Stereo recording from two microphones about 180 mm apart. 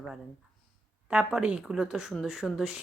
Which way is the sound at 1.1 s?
5° right (ahead or behind).